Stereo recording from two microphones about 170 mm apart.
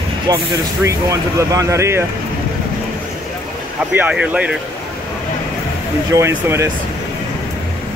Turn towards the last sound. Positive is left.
turn(degrees=-15)  # may be behind; listen again after turning